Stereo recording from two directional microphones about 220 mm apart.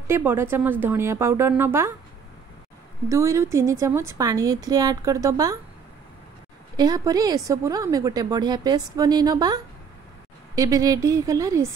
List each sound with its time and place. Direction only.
0.0 s a woman's voice: 10° right (ahead or behind)
3.1 s a woman's voice: 15° right (ahead or behind)
6.8 s a woman's voice: 20° right (ahead or behind)